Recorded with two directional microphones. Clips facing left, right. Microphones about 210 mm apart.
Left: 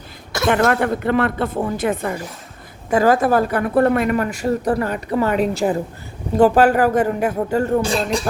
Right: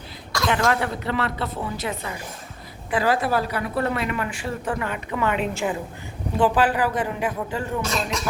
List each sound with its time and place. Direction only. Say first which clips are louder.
0.4 s speech: left 6 dB; 55° left (ahead or behind); by 8.3 s 30° left (ahead or behind)